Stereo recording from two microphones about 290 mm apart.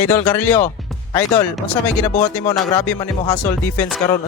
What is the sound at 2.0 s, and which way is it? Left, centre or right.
Speech, left.